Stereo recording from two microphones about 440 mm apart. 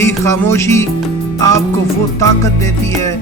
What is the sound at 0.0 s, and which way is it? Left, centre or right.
Music, centre.